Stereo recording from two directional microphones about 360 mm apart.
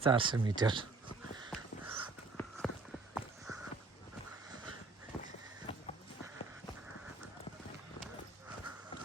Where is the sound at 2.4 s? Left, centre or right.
Centre.